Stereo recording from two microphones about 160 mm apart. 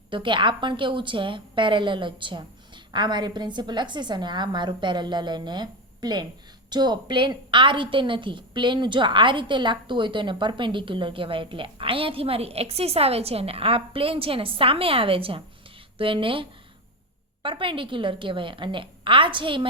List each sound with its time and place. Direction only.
0.1 s a woman's voice: 30° right (ahead or behind)